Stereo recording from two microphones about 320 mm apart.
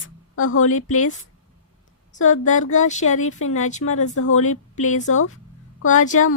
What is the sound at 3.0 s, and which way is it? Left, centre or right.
A woman's voice, left.